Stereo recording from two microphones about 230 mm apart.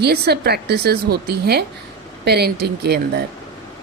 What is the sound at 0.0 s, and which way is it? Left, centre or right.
A woman's voice, right.